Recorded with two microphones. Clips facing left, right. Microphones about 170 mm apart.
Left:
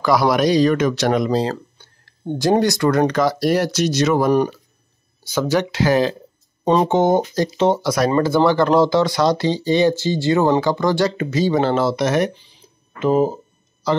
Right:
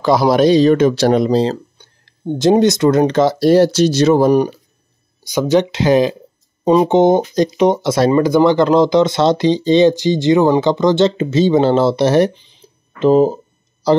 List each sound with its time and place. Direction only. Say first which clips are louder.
0.0 s speech: right 4 dB; 25° right (ahead or behind)
5.2 s speech: right 5 dB; 15° right (ahead or behind)
12.4 s a sound: right 3 dB; 25° right (ahead or behind)
13.8 s a man's voice: right 7 dB; 35° right (ahead or behind)